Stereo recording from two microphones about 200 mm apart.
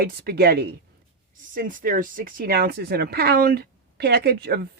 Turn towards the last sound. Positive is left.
turn(degrees=-50)  # may be behind; listen again after turning